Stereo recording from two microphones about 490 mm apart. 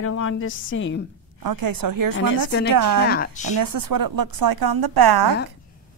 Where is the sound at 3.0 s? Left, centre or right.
Centre.